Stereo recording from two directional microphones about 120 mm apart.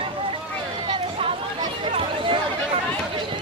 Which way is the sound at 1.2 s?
45° right (ahead or behind).